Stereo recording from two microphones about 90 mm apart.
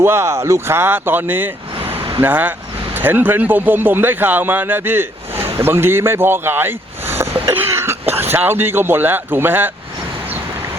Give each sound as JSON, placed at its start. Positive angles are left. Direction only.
{"t": 0.0, "sound": "speech", "side_deg": -30}
{"t": 2.0, "sound": "vehicle", "side_deg": -75}
{"t": 2.2, "sound": "speech", "side_deg": -20}